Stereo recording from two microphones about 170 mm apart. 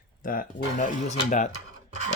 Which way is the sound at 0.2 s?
55° left (ahead or behind).